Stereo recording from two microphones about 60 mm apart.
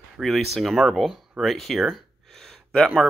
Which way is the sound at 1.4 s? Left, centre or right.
Centre.